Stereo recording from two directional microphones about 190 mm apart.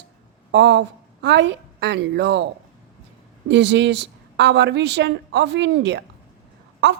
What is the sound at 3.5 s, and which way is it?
A woman's voice, 65° right (ahead or behind).